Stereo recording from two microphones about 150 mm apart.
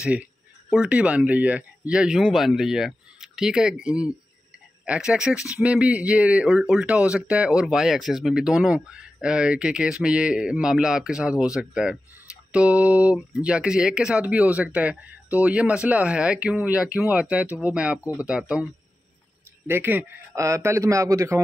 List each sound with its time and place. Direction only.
0.0 s speech: 10° right (ahead or behind)
19.7 s speech: 15° right (ahead or behind)